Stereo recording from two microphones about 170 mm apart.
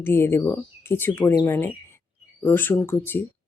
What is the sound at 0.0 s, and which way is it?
Speech, 15° left (ahead or behind).